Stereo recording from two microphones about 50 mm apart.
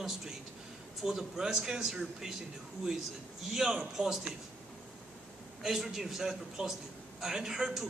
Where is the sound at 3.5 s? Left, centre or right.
Centre.